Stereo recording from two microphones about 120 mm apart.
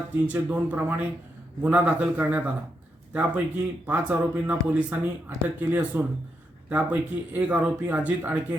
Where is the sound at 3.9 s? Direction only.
10° right (ahead or behind).